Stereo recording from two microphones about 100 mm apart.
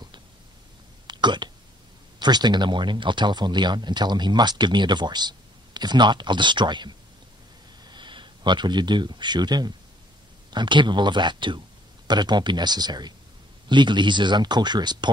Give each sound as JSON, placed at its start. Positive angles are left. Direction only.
{"t": 1.0, "sound": "hiccup", "side_deg": -50}
{"t": 2.1, "sound": "speech", "side_deg": -45}